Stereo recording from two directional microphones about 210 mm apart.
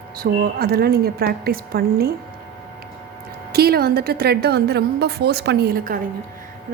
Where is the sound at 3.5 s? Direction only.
45° right (ahead or behind).